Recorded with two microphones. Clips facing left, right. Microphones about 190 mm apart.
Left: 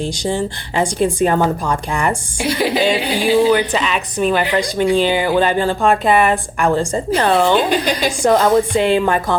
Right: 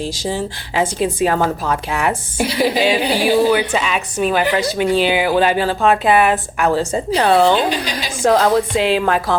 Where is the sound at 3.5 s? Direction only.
10° right (ahead or behind).